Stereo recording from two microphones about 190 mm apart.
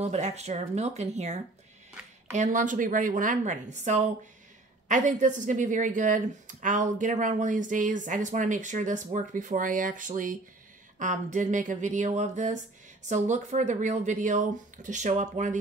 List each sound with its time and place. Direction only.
0.0 s a woman's voice: 35° right (ahead or behind)